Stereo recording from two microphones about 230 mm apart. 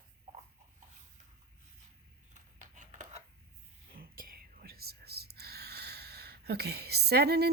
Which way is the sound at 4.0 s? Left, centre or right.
Right.